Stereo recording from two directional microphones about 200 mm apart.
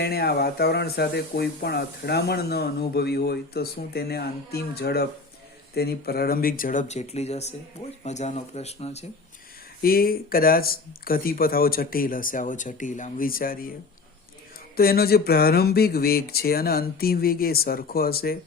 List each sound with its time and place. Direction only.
0.0 s speech: 50° left (ahead or behind); by 9.0 s 35° left (ahead or behind)
9.8 s speech: 50° left (ahead or behind)
14.8 s speech: 50° left (ahead or behind)